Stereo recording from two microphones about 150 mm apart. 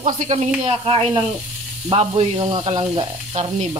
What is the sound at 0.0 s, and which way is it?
Speech, 50° right (ahead or behind).